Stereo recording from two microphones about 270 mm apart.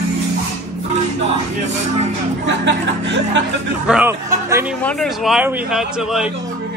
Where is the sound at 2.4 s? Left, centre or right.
Right.